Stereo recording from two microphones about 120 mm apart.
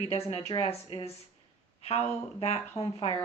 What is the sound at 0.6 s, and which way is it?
Speech, 55° left (ahead or behind).